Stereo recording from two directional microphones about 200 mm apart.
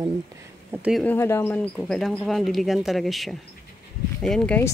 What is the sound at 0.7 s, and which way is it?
Speech, 5° right (ahead or behind).